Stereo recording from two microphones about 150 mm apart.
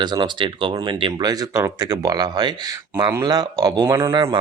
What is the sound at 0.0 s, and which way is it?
Speech, 30° right (ahead or behind).